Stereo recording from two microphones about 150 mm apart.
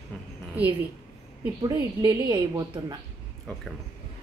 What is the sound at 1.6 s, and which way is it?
A woman's voice, 25° right (ahead or behind).